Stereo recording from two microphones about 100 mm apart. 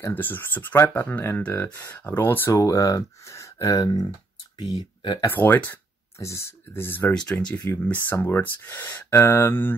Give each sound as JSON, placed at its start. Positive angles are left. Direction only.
{"t": 0.0, "sound": "speech", "side_deg": 20}
{"t": 2.6, "sound": "speech", "side_deg": 35}
{"t": 3.8, "sound": "speech", "side_deg": 45}
{"t": 5.2, "sound": "speech", "side_deg": 20}
{"t": 7.2, "sound": "speech", "side_deg": 10}